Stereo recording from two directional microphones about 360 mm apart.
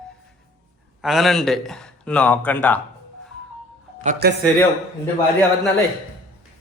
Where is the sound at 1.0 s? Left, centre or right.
Centre.